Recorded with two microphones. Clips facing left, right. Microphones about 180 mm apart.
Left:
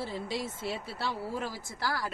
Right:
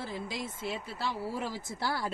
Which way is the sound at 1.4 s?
20° right (ahead or behind).